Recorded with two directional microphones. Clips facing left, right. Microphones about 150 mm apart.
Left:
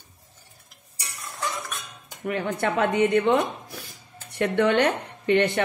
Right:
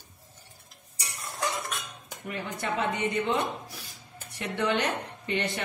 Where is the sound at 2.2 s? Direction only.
65° left (ahead or behind).